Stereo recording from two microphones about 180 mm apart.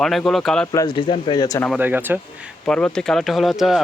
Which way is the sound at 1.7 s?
10° right (ahead or behind).